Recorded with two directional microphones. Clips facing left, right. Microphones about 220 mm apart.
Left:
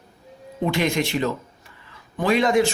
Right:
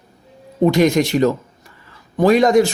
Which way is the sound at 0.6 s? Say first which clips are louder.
Right 8 dB; 40° right (ahead or behind).